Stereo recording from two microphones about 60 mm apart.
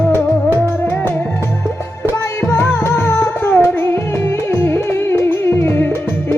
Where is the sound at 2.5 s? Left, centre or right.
Left.